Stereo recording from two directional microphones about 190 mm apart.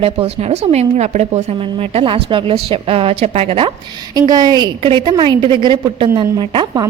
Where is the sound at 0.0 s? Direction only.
30° right (ahead or behind).